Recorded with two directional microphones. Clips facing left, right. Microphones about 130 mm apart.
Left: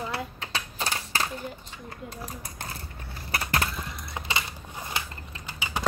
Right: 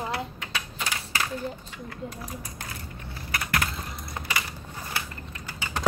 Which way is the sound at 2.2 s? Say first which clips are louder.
Even; 30° left (ahead or behind).